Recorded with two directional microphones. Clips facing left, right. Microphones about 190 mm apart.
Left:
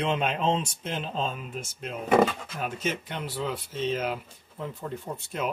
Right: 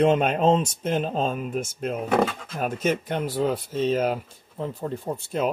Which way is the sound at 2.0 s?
Centre (ahead or behind).